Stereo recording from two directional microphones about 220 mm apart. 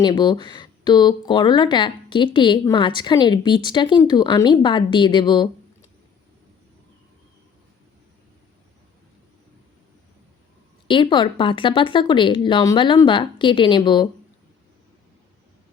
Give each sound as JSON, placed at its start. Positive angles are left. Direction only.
{"t": 0.0, "sound": "speech", "side_deg": 20}
{"t": 10.8, "sound": "speech", "side_deg": 20}